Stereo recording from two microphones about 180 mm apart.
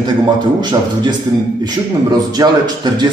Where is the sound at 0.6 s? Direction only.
25° right (ahead or behind).